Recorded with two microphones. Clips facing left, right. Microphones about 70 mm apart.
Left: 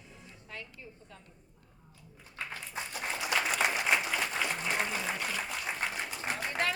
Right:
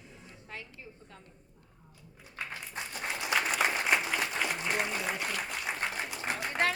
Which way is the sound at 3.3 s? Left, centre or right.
Centre.